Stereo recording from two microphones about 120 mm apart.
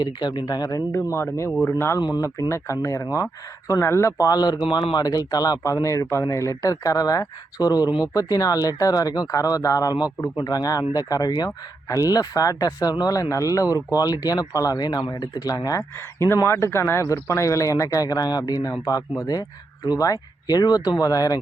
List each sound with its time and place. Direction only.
0.0 s speech: 40° left (ahead or behind)
0.9 s speech: 20° left (ahead or behind)
2.0 s speech: 35° left (ahead or behind)
4.6 s speech: 45° left (ahead or behind); by 21.3 s 30° left (ahead or behind)